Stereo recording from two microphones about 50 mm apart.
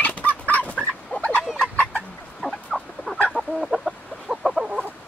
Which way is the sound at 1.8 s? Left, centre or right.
Left.